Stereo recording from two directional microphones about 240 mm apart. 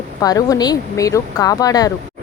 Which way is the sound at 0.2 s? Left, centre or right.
Centre.